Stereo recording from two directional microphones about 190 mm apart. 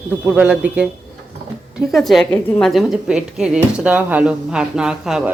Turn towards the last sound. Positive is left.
turn(degrees=-5)  # may be behind; listen again after turning